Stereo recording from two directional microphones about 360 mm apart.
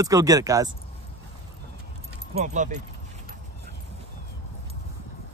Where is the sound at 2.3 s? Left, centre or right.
Centre.